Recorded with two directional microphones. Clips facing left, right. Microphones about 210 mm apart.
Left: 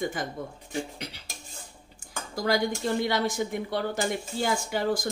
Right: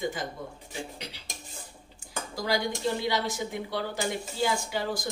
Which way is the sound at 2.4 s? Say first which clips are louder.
Left 2 dB; 50° left (ahead or behind).